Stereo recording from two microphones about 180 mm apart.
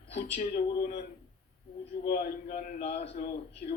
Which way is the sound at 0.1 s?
35° left (ahead or behind).